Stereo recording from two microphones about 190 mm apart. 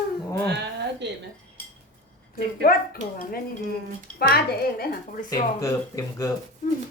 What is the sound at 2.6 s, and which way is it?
Speech, 50° left (ahead or behind).